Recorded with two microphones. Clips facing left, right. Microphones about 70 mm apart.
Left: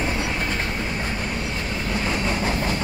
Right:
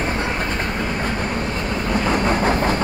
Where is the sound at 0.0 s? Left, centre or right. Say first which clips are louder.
Right 3 dB; right.